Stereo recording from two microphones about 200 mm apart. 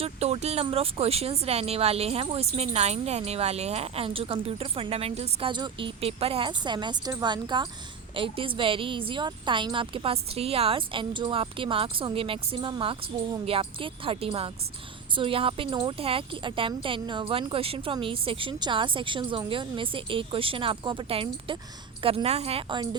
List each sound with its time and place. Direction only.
0.0 s speech: 30° right (ahead or behind)